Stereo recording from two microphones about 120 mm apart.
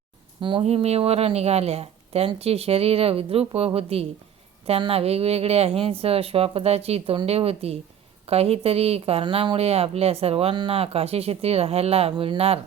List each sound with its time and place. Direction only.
0.6 s speech: 60° right (ahead or behind)
9.2 s speech: 45° right (ahead or behind)